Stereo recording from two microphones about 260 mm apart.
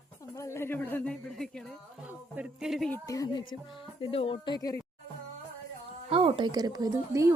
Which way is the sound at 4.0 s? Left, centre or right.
Left.